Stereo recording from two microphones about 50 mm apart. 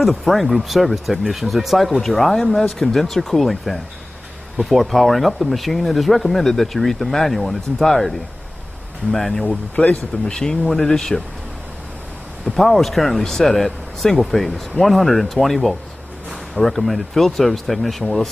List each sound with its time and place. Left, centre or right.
0.0 s speech: centre
9.8 s speech: left
10.3 s speech: centre
12.5 s speech: centre